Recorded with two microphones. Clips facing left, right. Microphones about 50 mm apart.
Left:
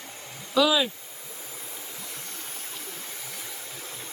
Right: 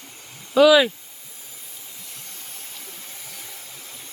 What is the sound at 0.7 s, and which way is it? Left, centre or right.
Speech, right.